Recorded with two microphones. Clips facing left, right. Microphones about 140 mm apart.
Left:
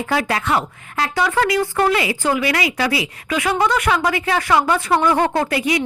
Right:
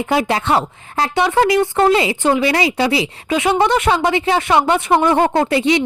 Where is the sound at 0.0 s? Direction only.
20° right (ahead or behind).